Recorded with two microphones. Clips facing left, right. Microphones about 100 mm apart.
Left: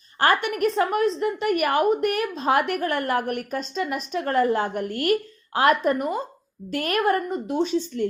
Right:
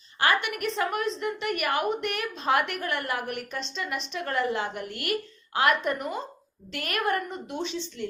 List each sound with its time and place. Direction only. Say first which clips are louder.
0.2 s a woman's voice: left 5 dB; 45° left (ahead or behind)